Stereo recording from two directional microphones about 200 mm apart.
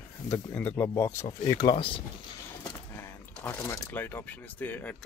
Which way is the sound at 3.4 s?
10° left (ahead or behind).